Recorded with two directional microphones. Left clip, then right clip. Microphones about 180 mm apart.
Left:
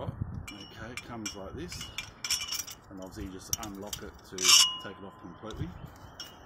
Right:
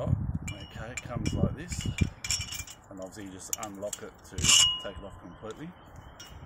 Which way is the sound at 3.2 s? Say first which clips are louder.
Left 1 dB; 45° right (ahead or behind).